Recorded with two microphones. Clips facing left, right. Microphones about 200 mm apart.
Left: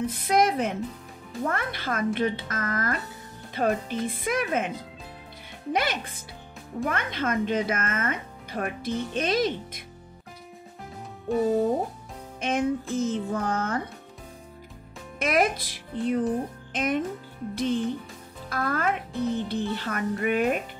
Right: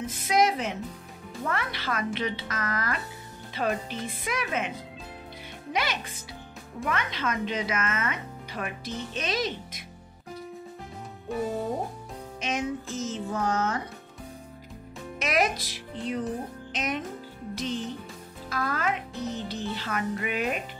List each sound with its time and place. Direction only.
0.0 s music: 60° left (ahead or behind)
1.4 s speech: 50° left (ahead or behind)
11.3 s speech: centre (ahead or behind)
12.4 s music: 55° left (ahead or behind)
15.1 s speech: 50° left (ahead or behind)
17.6 s music: 55° left (ahead or behind)
19.7 s speech: 50° left (ahead or behind)